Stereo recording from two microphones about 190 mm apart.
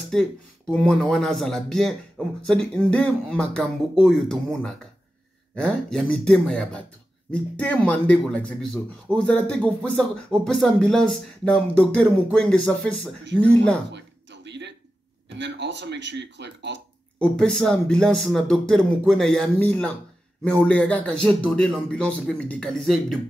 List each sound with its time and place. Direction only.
0.1 s speech: 5° left (ahead or behind)
13.9 s a sound: 65° right (ahead or behind)
15.3 s speech: 70° right (ahead or behind)
17.2 s speech: 5° left (ahead or behind)